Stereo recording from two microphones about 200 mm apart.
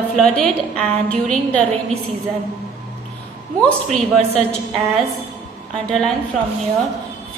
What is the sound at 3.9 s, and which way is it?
Speech, 30° right (ahead or behind).